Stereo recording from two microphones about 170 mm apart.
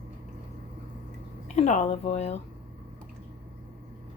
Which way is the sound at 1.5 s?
45° left (ahead or behind).